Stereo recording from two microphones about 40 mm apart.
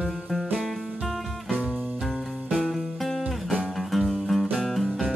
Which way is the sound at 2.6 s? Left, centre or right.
Centre.